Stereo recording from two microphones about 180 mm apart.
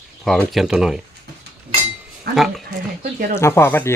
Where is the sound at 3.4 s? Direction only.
15° left (ahead or behind).